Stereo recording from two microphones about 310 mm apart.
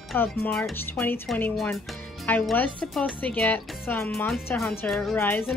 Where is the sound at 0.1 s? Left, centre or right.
Centre.